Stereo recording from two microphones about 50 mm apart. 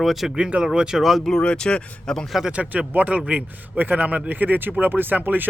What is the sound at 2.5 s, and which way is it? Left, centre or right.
A man's voice, right.